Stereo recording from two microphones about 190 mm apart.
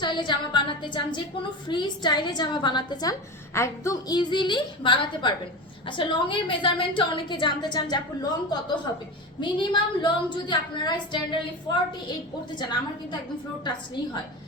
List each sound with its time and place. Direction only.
0.0 s a woman's voice: 25° left (ahead or behind)
13.7 s a woman's voice: 20° left (ahead or behind)